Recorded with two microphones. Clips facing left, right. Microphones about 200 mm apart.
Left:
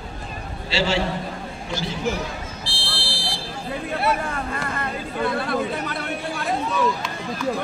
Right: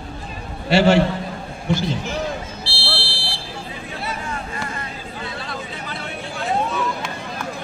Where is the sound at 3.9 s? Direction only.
60° left (ahead or behind).